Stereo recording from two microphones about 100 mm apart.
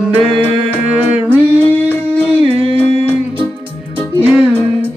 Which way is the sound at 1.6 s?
20° left (ahead or behind).